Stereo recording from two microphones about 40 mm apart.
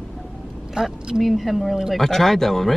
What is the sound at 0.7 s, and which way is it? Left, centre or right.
Speech, centre.